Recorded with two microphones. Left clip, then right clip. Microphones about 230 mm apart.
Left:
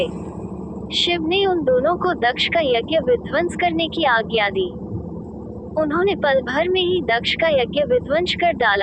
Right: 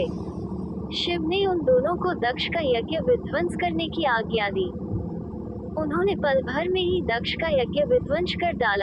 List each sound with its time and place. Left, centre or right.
1.4 s speech: left
5.7 s speech: left